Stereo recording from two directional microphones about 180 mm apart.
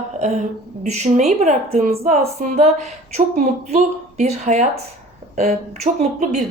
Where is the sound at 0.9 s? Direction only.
40° right (ahead or behind).